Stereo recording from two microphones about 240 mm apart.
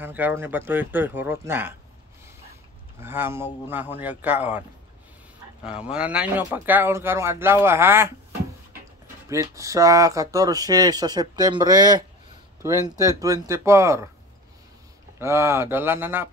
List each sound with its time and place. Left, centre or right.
0.0 s speech: centre
3.0 s speech: centre
15.1 s speech: centre